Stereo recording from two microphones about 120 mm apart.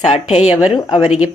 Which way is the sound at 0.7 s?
35° left (ahead or behind).